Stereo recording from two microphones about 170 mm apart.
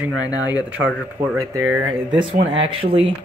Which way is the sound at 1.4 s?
20° right (ahead or behind).